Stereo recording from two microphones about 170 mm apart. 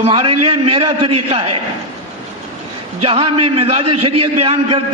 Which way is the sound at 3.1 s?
35° right (ahead or behind).